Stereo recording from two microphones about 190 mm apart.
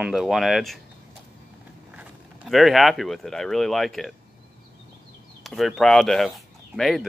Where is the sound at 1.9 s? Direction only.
5° right (ahead or behind).